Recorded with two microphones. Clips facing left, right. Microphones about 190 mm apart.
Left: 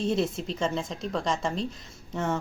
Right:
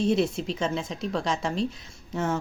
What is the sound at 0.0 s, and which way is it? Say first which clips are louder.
A woman's voice: right 3 dB; centre (ahead or behind).